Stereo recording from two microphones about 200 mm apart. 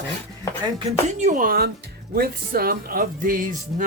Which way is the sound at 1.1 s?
35° right (ahead or behind).